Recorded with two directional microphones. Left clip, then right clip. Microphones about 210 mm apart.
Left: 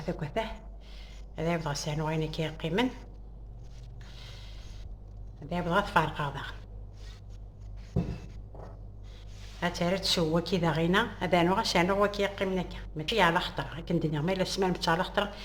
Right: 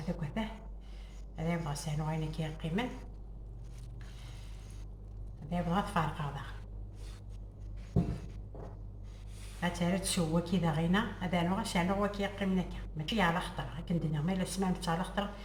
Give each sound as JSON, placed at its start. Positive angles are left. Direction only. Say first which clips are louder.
{"t": 0.2, "sound": "a sound", "louder": "left 7 dB", "side_deg": 55}
{"t": 1.4, "sound": "a woman's voice", "louder": "left 7 dB", "side_deg": 50}
{"t": 5.5, "sound": "a woman's voice", "louder": "left 6 dB", "side_deg": 55}
{"t": 9.6, "sound": "a woman's voice", "louder": "left 5 dB", "side_deg": 50}